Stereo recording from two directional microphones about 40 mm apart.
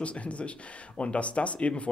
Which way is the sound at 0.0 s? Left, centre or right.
Left.